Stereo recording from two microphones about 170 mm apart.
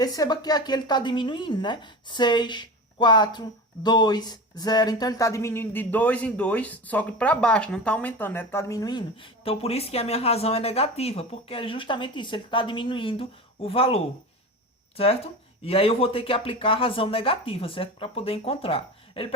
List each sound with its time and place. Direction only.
0.0 s speech: 20° left (ahead or behind)